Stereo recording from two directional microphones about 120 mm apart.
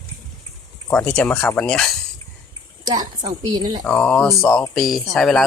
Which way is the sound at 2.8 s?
35° right (ahead or behind).